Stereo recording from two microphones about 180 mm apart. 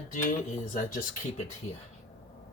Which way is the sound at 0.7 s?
50° left (ahead or behind).